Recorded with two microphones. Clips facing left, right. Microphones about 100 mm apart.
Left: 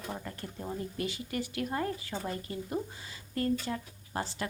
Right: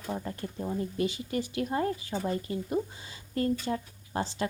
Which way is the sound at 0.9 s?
20° right (ahead or behind).